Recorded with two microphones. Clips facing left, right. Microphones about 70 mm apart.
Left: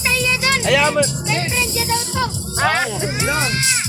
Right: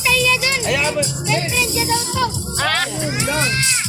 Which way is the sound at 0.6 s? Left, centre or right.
Left.